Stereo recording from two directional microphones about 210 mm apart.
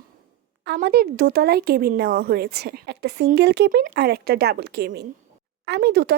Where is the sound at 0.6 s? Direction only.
50° right (ahead or behind).